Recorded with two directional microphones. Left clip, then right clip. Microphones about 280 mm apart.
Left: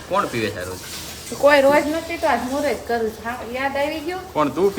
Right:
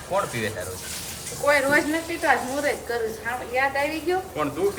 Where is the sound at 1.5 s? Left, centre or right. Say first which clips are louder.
Left 6 dB; centre.